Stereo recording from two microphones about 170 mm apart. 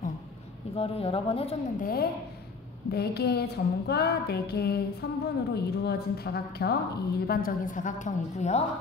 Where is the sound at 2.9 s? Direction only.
70° left (ahead or behind); by 8.6 s 45° left (ahead or behind).